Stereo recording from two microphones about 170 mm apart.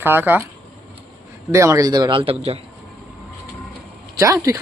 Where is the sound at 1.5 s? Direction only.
15° right (ahead or behind); by 2.6 s 35° right (ahead or behind).